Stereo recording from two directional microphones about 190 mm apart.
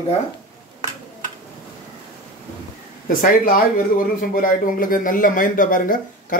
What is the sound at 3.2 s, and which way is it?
Speech, 50° left (ahead or behind).